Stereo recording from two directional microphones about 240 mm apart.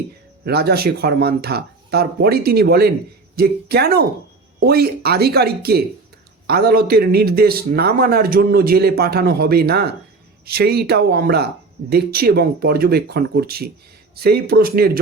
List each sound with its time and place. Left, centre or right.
0.4 s a man's voice: right